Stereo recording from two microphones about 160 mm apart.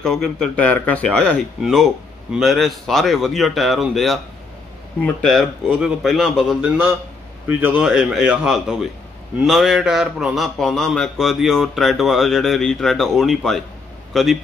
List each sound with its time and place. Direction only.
0.0 s a man's voice: 5° left (ahead or behind)
7.4 s a man's voice: 10° right (ahead or behind)